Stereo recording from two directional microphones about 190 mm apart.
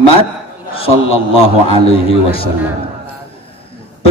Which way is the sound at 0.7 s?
30° left (ahead or behind).